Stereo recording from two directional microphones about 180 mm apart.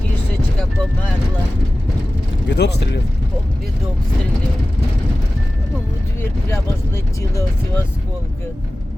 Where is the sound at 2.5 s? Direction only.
65° left (ahead or behind).